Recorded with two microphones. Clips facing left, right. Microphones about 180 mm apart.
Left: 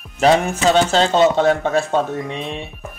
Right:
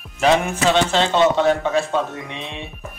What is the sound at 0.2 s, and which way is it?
Speech, 40° left (ahead or behind).